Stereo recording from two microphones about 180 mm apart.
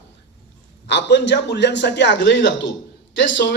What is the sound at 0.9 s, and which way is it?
A man's voice, 75° left (ahead or behind).